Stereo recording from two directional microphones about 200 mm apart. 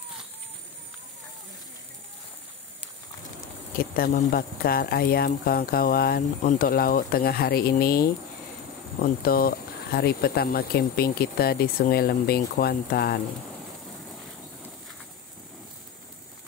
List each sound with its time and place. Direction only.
3.7 s speech: 45° left (ahead or behind)